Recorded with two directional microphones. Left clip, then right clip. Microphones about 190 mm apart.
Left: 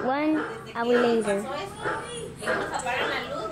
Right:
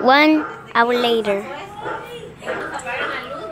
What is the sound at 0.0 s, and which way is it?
A woman's voice, 30° right (ahead or behind).